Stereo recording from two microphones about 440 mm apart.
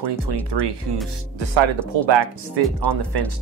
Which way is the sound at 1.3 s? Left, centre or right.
Right.